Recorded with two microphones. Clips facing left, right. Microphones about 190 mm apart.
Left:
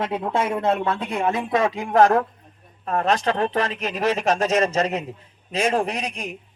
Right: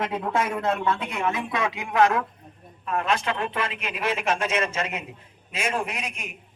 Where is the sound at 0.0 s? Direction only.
30° left (ahead or behind).